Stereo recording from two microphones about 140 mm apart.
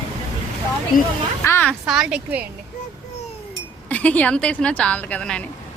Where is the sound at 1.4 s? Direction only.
20° left (ahead or behind).